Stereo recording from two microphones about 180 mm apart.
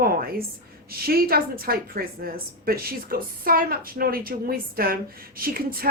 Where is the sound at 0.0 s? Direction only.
55° right (ahead or behind).